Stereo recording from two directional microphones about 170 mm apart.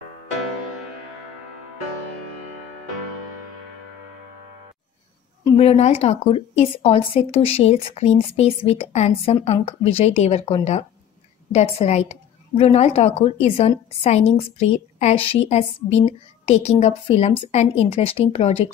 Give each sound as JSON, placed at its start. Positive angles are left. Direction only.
{"t": 5.6, "sound": "speech", "side_deg": 35}